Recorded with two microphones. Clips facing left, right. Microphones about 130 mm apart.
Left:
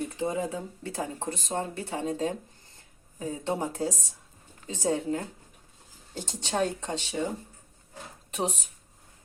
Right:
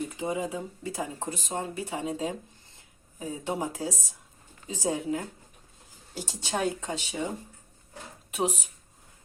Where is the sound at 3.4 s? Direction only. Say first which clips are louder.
Left 2 dB; 10° right (ahead or behind).